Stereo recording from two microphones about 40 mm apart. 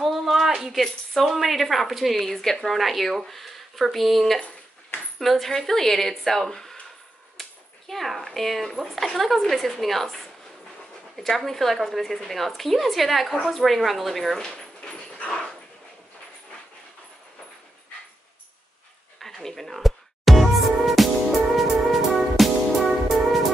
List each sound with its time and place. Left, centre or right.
0.0 s a sound: centre
1.2 s speech: centre
7.3 s cap gun: centre
8.9 s speech: centre
15.1 s dog: left
19.1 s music: centre